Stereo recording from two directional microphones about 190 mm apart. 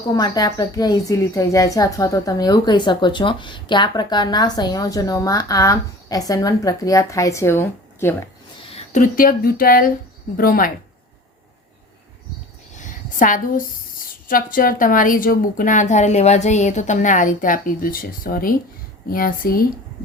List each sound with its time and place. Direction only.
0.1 s a woman's voice: 20° left (ahead or behind)
8.7 s a woman's voice: 40° left (ahead or behind)
12.7 s a sound: 40° left (ahead or behind)
14.0 s a woman's voice: 45° left (ahead or behind)